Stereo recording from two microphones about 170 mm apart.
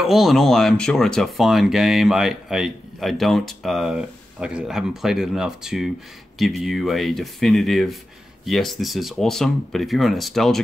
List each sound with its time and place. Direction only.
0.0 s speech: centre (ahead or behind)